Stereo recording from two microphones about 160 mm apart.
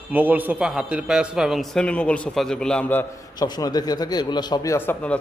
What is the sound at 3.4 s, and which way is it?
Speech, 25° left (ahead or behind).